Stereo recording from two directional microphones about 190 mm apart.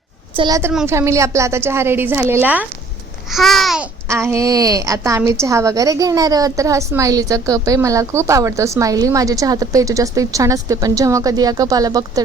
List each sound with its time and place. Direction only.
0.3 s a woman's voice: 20° right (ahead or behind)
3.2 s babbling: centre (ahead or behind)
4.1 s a woman's voice: 15° right (ahead or behind)